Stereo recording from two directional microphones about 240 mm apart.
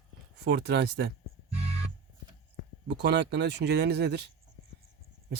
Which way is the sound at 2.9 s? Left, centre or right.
Right.